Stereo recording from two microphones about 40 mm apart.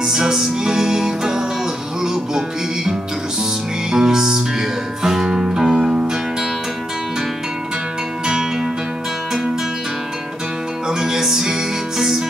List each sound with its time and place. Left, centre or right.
0.0 s music: centre
10.9 s music: centre